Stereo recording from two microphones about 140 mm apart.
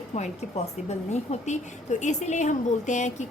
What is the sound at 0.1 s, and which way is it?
Speech, 50° left (ahead or behind).